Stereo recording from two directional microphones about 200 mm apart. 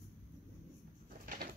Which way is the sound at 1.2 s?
45° right (ahead or behind).